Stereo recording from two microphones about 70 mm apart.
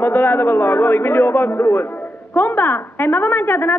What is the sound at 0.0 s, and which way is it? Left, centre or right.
A man's voice, left.